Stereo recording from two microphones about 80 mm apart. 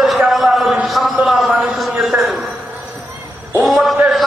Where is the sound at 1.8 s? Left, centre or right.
Centre.